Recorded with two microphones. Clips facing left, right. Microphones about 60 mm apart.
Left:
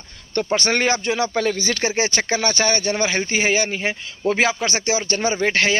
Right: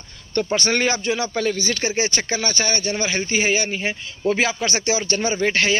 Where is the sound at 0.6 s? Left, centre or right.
Left.